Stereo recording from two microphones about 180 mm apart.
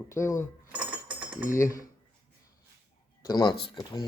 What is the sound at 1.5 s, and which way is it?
Speech, 15° left (ahead or behind).